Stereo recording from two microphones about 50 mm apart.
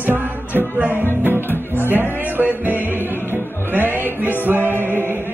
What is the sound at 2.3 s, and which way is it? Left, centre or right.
Music, right.